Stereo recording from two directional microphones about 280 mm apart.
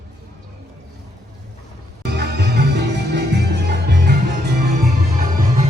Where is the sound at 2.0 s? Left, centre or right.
Right.